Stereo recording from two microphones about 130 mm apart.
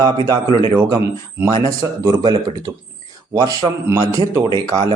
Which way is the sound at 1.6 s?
25° right (ahead or behind).